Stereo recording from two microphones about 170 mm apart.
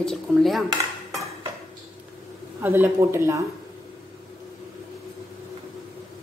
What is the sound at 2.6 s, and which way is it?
Speech, 10° right (ahead or behind).